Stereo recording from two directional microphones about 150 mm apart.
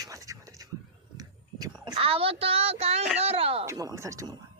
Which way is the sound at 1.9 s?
40° right (ahead or behind).